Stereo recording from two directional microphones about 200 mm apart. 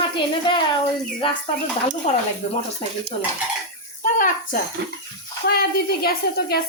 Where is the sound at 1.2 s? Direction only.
25° left (ahead or behind).